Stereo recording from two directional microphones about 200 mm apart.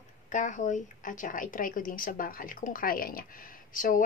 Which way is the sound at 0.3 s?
40° left (ahead or behind).